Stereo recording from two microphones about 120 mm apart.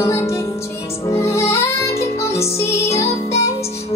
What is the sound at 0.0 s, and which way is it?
Music, 20° left (ahead or behind).